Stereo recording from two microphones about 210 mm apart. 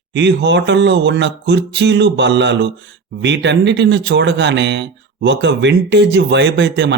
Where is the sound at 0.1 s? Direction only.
55° right (ahead or behind).